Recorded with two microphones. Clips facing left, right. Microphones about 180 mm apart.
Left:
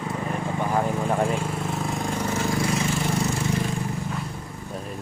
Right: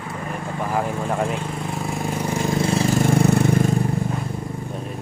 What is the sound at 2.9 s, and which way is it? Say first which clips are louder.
Engine: right 8 dB; 55° right (ahead or behind).